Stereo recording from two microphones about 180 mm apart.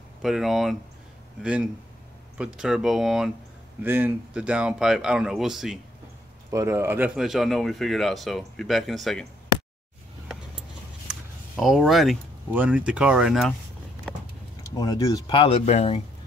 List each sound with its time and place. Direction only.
0.2 s speech: centre (ahead or behind)
6.5 s speech: 15° right (ahead or behind); by 9.3 s centre (ahead or behind)
11.1 s a sound: 5° right (ahead or behind)
11.5 s speech: centre (ahead or behind)
14.8 s speech: 20° left (ahead or behind); by 16.0 s 35° left (ahead or behind)